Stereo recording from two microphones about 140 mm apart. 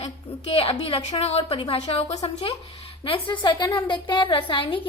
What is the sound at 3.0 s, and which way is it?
A woman's voice, 40° left (ahead or behind).